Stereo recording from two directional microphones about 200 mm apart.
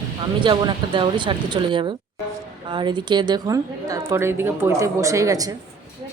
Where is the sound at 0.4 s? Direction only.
25° right (ahead or behind).